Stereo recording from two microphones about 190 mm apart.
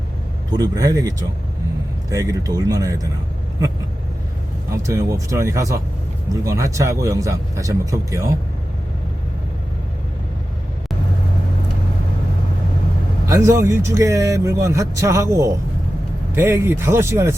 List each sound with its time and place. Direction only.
0.5 s speech: 20° right (ahead or behind)
4.7 s speech: 15° right (ahead or behind)
13.2 s speech: 15° right (ahead or behind)